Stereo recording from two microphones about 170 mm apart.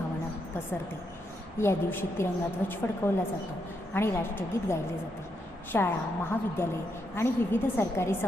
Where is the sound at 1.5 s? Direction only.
15° left (ahead or behind).